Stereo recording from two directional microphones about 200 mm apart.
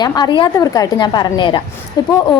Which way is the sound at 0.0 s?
20° left (ahead or behind).